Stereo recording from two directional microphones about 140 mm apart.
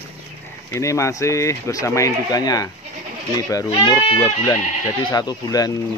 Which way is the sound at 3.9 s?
40° left (ahead or behind).